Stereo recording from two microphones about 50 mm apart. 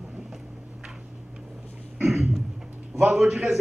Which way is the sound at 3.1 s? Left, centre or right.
Centre.